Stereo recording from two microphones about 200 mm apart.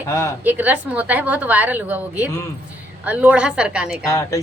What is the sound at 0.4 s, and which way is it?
A woman's voice, 10° right (ahead or behind).